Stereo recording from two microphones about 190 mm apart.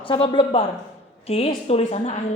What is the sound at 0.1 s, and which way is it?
A woman's voice, 30° left (ahead or behind).